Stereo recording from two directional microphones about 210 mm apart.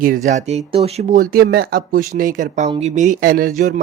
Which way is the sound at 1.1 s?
45° right (ahead or behind).